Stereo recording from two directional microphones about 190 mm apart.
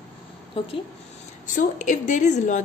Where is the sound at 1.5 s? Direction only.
40° left (ahead or behind).